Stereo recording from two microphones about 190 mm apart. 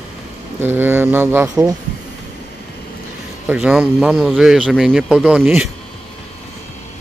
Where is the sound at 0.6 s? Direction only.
10° right (ahead or behind).